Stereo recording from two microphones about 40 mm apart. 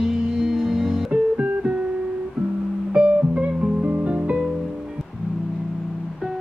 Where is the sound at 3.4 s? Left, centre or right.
Right.